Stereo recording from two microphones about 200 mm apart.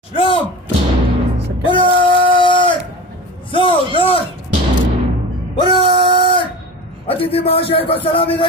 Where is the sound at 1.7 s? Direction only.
25° left (ahead or behind).